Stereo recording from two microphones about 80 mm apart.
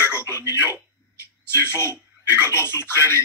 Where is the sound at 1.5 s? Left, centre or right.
Left.